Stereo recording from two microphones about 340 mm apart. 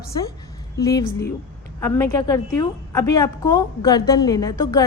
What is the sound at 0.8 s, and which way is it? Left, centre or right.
A woman's voice, centre.